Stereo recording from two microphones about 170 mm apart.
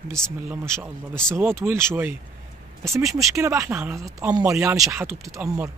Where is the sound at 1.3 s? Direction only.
15° right (ahead or behind).